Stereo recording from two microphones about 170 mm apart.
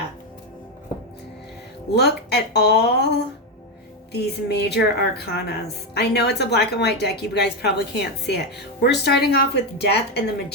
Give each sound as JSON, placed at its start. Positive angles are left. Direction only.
{"t": 2.0, "sound": "speech", "side_deg": 75}
{"t": 4.1, "sound": "speech", "side_deg": 75}